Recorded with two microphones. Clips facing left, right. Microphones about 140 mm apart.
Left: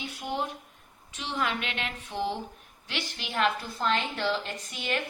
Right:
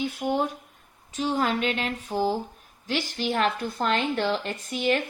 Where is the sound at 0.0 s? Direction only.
45° right (ahead or behind).